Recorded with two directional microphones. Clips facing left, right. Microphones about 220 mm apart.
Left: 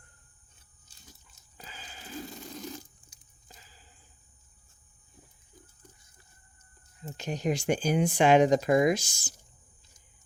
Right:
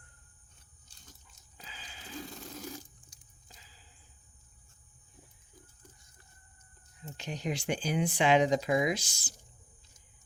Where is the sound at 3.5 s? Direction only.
45° left (ahead or behind).